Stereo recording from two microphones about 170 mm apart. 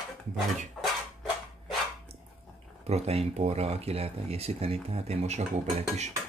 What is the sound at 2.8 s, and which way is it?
Speech, 40° right (ahead or behind).